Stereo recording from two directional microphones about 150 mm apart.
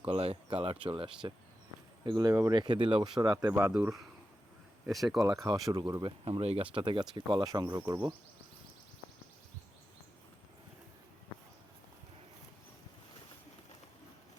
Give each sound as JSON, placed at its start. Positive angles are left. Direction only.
{"t": 0.0, "sound": "speech", "side_deg": -40}
{"t": 2.3, "sound": "speech", "side_deg": -20}
{"t": 2.6, "sound": "speech", "side_deg": -30}
{"t": 4.9, "sound": "speech", "side_deg": 0}
{"t": 5.2, "sound": "speech", "side_deg": -25}
{"t": 7.8, "sound": "speech", "side_deg": -15}